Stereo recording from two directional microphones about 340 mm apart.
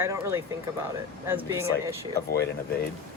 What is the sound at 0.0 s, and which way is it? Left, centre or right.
Speech, centre.